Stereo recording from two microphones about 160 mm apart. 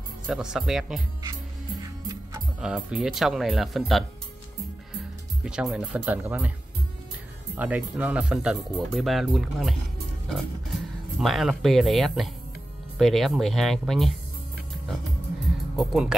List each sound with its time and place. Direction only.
0.3 s speech: 5° right (ahead or behind)
1.8 s music: 25° right (ahead or behind)
2.6 s speech: 5° right (ahead or behind)
7.5 s speech: 10° right (ahead or behind)
15.7 s speech: centre (ahead or behind)